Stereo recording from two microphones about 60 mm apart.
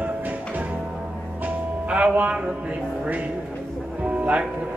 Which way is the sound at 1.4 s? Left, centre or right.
Right.